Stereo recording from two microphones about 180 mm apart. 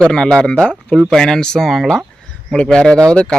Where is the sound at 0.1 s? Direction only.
5° left (ahead or behind).